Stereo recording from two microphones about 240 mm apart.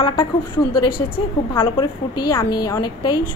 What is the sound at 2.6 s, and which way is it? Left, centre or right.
Speech, centre.